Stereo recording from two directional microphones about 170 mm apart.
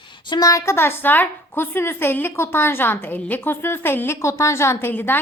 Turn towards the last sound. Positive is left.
turn(degrees=10)  # may be behind; listen again after turning